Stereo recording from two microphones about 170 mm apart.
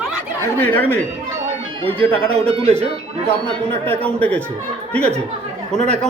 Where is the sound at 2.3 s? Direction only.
35° right (ahead or behind).